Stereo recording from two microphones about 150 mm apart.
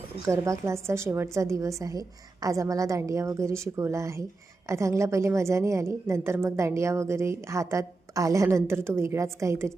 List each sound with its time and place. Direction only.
0.3 s a woman's voice: 20° right (ahead or behind)